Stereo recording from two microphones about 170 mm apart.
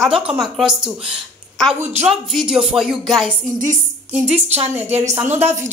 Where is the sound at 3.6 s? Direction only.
45° right (ahead or behind).